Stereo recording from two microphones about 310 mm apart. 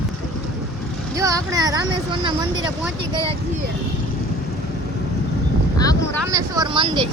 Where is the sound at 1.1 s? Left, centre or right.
Centre.